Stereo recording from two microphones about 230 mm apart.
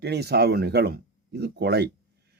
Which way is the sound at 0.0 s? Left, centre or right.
Right.